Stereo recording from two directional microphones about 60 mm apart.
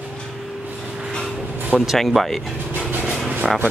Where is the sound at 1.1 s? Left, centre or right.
Centre.